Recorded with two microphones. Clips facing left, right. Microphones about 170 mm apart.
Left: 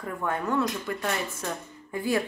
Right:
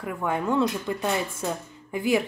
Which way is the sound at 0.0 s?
15° right (ahead or behind).